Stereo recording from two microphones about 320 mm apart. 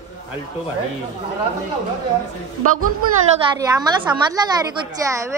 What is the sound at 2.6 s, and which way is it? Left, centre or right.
Speech, right.